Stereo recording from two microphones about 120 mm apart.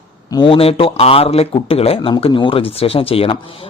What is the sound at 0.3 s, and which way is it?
Speech, 45° left (ahead or behind).